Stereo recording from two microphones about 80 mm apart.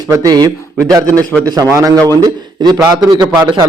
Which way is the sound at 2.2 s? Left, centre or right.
Right.